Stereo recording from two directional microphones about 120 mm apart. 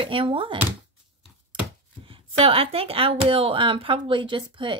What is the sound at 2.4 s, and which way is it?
Speech, 55° right (ahead or behind).